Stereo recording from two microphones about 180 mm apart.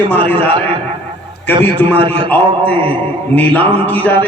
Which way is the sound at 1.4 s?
10° left (ahead or behind).